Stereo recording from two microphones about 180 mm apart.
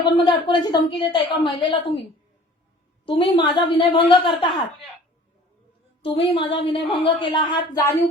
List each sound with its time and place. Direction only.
0.0 s a woman's voice: 25° left (ahead or behind)
3.1 s a woman's voice: 25° left (ahead or behind)
6.0 s a woman's voice: 30° left (ahead or behind)